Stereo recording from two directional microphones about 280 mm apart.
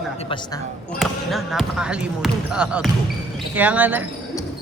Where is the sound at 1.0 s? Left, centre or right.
Centre.